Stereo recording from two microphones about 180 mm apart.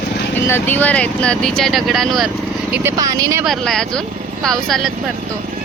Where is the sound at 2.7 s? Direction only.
15° right (ahead or behind).